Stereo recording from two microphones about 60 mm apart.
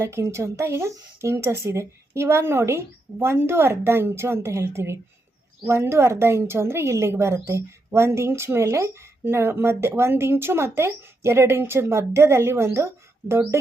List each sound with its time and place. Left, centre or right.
0.0 s a woman's voice: right